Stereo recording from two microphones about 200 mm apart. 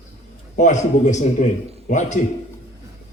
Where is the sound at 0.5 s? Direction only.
35° left (ahead or behind).